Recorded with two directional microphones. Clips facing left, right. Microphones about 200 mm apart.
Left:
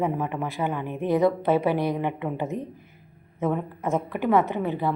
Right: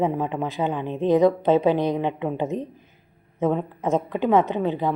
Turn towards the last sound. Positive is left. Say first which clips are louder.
# right 2 dB
turn(degrees=-20)  # may be behind; listen again after turning